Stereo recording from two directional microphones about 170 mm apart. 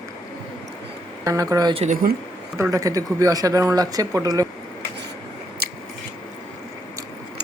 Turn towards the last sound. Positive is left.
turn(degrees=-65)  # may be behind; listen again after turning